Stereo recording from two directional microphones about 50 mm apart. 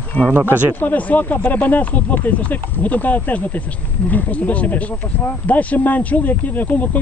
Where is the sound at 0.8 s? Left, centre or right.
Left.